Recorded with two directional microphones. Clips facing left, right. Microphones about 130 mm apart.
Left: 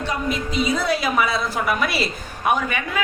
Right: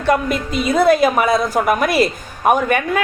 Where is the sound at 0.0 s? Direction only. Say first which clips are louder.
Right 7 dB; 55° right (ahead or behind).